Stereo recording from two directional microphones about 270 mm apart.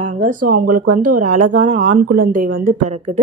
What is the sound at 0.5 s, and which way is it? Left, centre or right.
Speech, right.